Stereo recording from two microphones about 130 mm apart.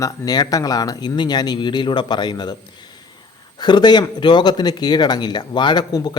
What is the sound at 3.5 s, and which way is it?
Speech, 35° left (ahead or behind).